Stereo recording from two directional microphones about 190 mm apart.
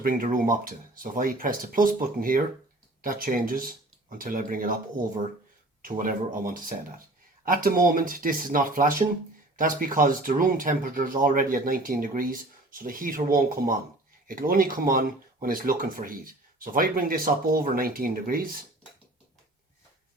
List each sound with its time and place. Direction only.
0.0 s speech: 50° right (ahead or behind)